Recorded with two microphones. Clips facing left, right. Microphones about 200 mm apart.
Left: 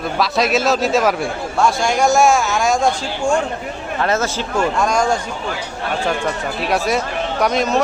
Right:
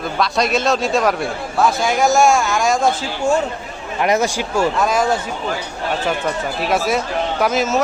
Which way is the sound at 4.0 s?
15° right (ahead or behind).